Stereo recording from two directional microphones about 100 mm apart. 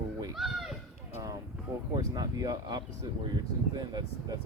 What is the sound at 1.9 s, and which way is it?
Speech, 40° right (ahead or behind).